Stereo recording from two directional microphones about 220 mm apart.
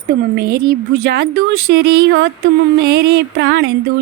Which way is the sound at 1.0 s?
45° right (ahead or behind).